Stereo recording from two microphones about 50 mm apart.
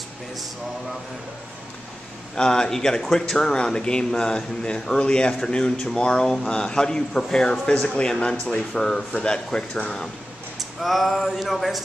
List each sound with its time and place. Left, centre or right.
2.3 s speech: centre
10.8 s speech: centre